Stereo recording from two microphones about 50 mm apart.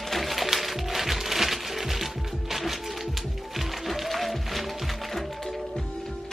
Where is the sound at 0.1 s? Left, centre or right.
Centre.